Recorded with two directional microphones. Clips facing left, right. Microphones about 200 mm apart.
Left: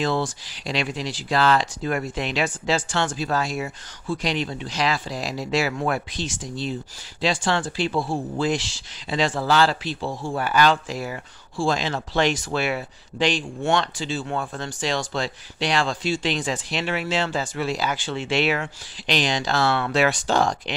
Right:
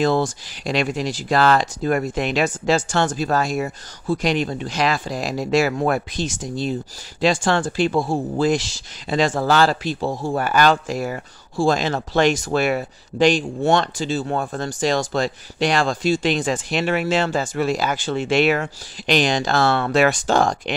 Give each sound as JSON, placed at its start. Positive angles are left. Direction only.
{"t": 0.0, "sound": "speech", "side_deg": -45}